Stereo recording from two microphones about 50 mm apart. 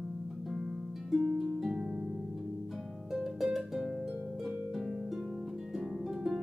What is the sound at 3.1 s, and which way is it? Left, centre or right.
Music, centre.